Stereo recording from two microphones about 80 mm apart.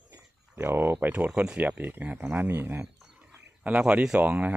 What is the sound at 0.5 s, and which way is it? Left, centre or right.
Speech, right.